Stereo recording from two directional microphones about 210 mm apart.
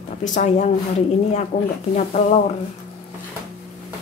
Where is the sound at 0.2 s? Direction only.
35° left (ahead or behind).